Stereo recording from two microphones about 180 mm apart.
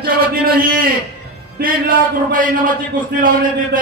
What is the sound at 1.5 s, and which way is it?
A man's voice, 55° right (ahead or behind).